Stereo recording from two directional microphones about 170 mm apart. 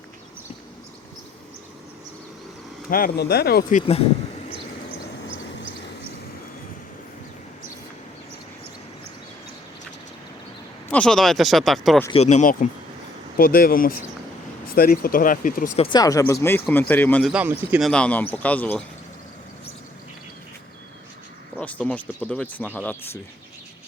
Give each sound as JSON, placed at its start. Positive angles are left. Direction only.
{"t": 2.9, "sound": "speech", "side_deg": 65}
{"t": 10.9, "sound": "speech", "side_deg": 5}
{"t": 12.1, "sound": "speech", "side_deg": 40}
{"t": 13.3, "sound": "speech", "side_deg": 60}
{"t": 15.8, "sound": "speech", "side_deg": 25}
{"t": 17.3, "sound": "speech", "side_deg": -10}
{"t": 21.6, "sound": "speech", "side_deg": 10}